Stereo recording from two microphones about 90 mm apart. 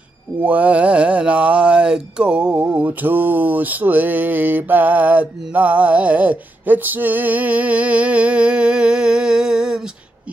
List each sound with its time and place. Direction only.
0.4 s mantra: 15° right (ahead or behind)